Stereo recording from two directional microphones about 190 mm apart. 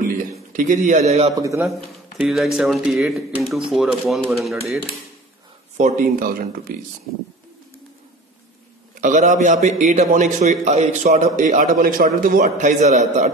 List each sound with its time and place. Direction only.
0.5 s a man's voice: 45° right (ahead or behind)
1.3 s a man's voice: 15° right (ahead or behind)
2.1 s speech: centre (ahead or behind)
5.8 s speech: 40° right (ahead or behind)
8.9 s a man's voice: 40° right (ahead or behind)